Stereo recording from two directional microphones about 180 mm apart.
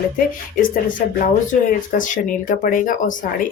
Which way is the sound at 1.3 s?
45° left (ahead or behind).